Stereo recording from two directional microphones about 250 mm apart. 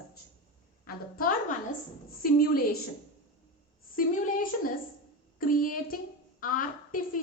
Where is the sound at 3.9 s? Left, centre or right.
Left.